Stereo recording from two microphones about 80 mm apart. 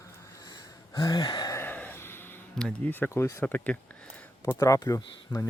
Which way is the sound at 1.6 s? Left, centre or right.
Left.